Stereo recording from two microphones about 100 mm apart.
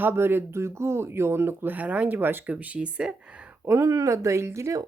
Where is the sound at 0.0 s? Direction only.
25° right (ahead or behind).